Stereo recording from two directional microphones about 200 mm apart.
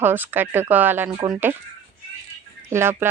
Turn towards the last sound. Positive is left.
turn(degrees=-10)  # may be behind; listen again after turning